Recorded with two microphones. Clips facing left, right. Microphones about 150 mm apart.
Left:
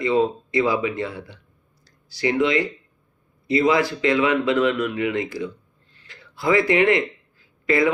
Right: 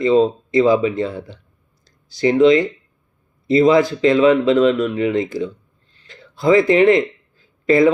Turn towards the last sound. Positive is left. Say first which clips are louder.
# right 6 dB
turn(degrees=-25)  # may be behind; listen again after turning